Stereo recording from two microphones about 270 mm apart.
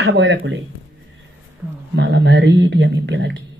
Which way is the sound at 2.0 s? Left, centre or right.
Right.